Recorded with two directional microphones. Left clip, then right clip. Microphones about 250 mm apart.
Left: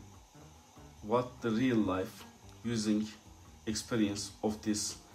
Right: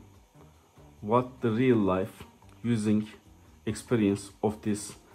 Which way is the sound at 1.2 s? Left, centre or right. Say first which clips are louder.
Right 5 dB; right.